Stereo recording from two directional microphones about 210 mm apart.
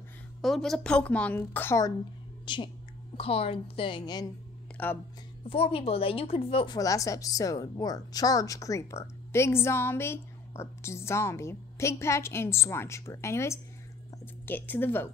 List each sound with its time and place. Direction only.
0.4 s a woman's voice: centre (ahead or behind); by 4.3 s 20° left (ahead or behind)
4.8 s a woman's voice: 10° left (ahead or behind)
5.5 s a woman's voice: 25° left (ahead or behind); by 15.0 s 10° left (ahead or behind)